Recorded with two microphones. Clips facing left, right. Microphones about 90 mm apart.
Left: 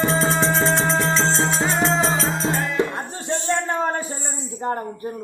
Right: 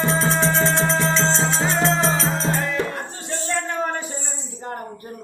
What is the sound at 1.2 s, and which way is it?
Music, 5° left (ahead or behind).